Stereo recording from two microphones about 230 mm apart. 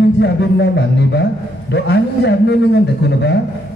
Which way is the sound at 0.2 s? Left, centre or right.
Left.